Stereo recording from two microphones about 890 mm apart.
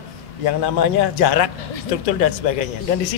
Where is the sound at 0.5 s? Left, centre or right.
Left.